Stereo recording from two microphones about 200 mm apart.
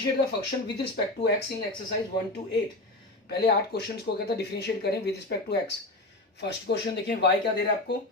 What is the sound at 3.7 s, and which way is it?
Speech, 55° left (ahead or behind).